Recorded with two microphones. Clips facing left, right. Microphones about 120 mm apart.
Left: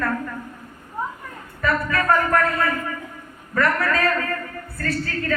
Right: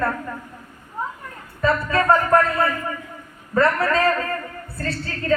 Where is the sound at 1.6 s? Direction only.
25° right (ahead or behind).